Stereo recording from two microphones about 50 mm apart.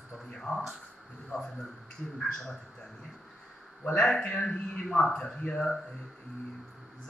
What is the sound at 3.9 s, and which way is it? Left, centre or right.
A man's voice, centre.